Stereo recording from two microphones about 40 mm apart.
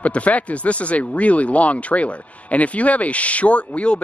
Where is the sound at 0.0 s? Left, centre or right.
Left.